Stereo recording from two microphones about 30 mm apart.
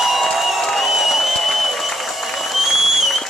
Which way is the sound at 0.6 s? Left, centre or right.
Centre.